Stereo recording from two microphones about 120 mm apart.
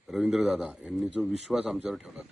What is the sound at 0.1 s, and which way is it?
Speech, centre (ahead or behind).